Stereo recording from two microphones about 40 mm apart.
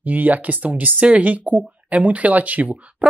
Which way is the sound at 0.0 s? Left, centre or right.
Right.